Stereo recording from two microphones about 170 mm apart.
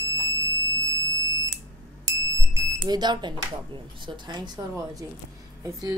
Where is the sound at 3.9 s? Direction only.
30° right (ahead or behind).